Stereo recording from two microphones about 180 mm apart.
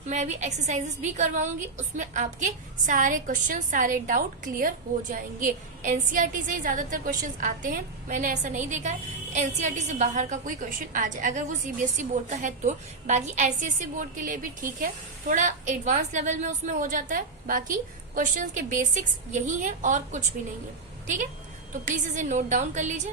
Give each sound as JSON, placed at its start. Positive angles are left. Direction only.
{"t": 0.1, "sound": "a woman's voice", "side_deg": -40}
{"t": 21.7, "sound": "a woman's voice", "side_deg": -45}